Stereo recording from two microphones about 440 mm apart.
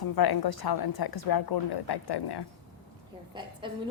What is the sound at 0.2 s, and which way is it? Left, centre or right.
A woman's voice, left.